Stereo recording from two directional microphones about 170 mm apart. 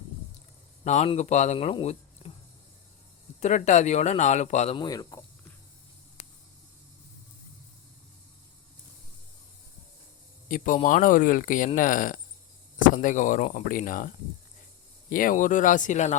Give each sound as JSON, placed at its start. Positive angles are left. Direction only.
{"t": 0.9, "sound": "speech", "side_deg": 40}
{"t": 3.4, "sound": "speech", "side_deg": 45}
{"t": 4.7, "sound": "speech", "side_deg": 25}
{"t": 6.2, "sound": "a sound", "side_deg": 40}
{"t": 10.5, "sound": "speech", "side_deg": 55}
{"t": 15.1, "sound": "speech", "side_deg": 55}